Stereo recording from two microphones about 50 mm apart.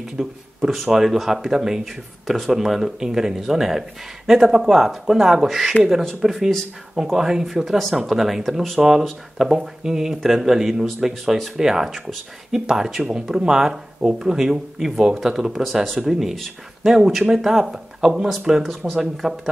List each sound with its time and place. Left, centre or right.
0.2 s speech: centre